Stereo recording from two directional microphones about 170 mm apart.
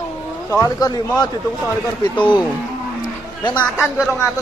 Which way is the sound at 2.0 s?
25° left (ahead or behind).